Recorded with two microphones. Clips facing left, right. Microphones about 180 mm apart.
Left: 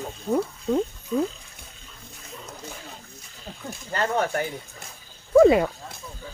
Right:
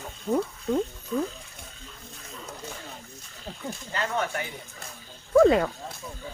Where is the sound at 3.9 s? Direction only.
40° left (ahead or behind).